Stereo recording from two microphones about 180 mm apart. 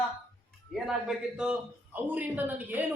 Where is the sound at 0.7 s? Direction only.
Centre (ahead or behind).